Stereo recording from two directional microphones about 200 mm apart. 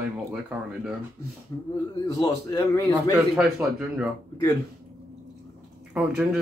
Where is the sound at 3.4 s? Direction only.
5° right (ahead or behind).